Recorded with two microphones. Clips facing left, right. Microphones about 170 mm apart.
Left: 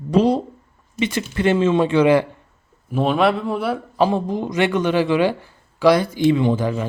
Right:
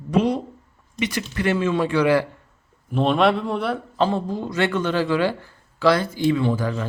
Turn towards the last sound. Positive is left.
turn(degrees=15)  # may be behind; listen again after turning